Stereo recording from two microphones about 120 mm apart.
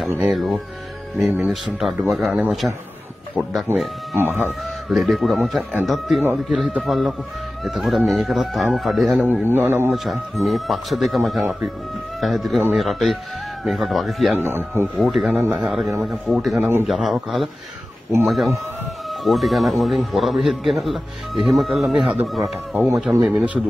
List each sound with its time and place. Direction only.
0.2 s a man's voice: centre (ahead or behind)
2.6 s speech: 20° right (ahead or behind)
4.5 s a man's voice: centre (ahead or behind)
5.6 s a man's voice: 10° right (ahead or behind)
5.9 s a man's voice: centre (ahead or behind)
9.2 s a man's voice: 15° right (ahead or behind)
9.9 s a man's voice: centre (ahead or behind)
14.4 s speech: 20° right (ahead or behind)
15.0 s a man's voice: 5° right (ahead or behind)
16.5 s a man's voice: 20° right (ahead or behind)
16.8 s a man's voice: centre (ahead or behind)